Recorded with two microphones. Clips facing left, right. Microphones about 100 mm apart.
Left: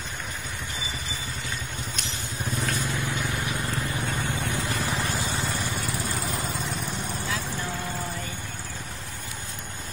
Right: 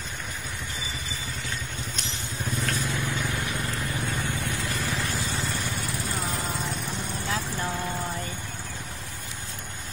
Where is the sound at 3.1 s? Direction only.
15° left (ahead or behind).